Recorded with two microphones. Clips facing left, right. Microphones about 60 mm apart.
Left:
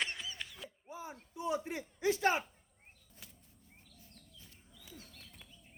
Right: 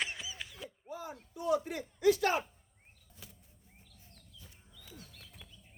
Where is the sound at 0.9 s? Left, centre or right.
Left.